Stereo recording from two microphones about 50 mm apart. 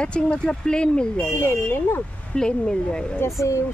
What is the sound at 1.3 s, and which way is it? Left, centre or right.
Speech, left.